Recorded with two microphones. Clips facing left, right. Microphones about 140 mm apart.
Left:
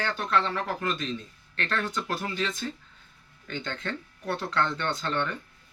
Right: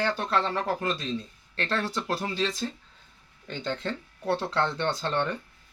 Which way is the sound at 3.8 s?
30° right (ahead or behind).